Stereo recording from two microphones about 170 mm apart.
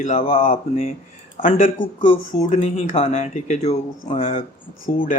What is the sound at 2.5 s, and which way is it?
Speech, 40° left (ahead or behind).